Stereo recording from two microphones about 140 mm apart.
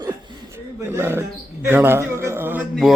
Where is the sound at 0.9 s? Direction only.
15° right (ahead or behind).